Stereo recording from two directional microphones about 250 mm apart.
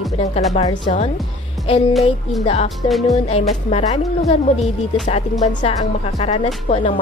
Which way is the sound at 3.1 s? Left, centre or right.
Left.